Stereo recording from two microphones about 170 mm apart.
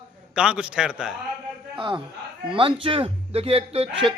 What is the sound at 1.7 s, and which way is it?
A man's voice, 30° right (ahead or behind).